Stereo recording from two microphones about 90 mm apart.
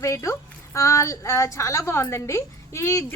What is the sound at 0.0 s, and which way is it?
A woman's voice, 35° left (ahead or behind).